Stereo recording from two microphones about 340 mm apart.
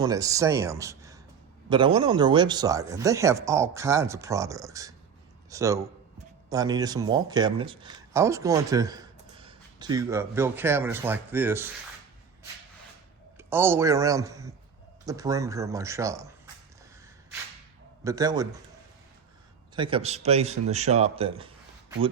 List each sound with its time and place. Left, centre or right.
0.0 s a man's voice: centre
13.3 s speech: centre
18.0 s speech: centre
19.7 s a man's voice: centre